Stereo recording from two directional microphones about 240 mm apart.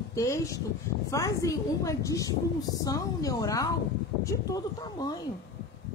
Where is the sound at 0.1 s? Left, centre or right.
Centre.